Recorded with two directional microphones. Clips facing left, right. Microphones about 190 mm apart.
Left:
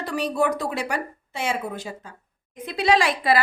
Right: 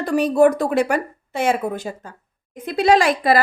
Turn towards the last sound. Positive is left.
turn(degrees=-45)  # may be behind; listen again after turning